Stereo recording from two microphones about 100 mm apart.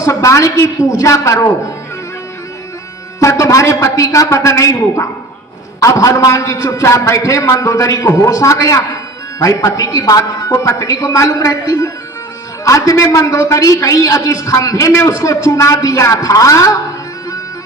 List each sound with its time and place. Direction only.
0.0 s a man's voice: 35° left (ahead or behind)
3.2 s a man's voice: 30° left (ahead or behind)